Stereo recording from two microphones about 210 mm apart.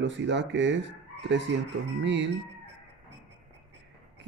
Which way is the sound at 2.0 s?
60° right (ahead or behind).